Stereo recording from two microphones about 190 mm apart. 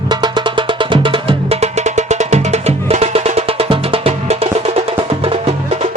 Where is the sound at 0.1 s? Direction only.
25° right (ahead or behind).